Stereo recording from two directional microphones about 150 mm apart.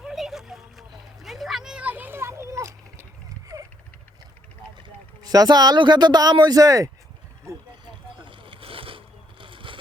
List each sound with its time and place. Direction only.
0.0 s a sound: centre (ahead or behind); by 3.7 s 20° right (ahead or behind)
4.8 s speech: 25° right (ahead or behind)
8.3 s boat: 35° right (ahead or behind)